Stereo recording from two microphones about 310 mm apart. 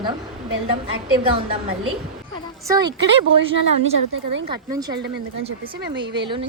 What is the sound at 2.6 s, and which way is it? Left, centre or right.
Speech, centre.